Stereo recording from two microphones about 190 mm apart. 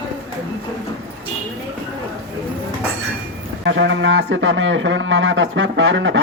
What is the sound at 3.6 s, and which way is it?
Speech, 70° right (ahead or behind).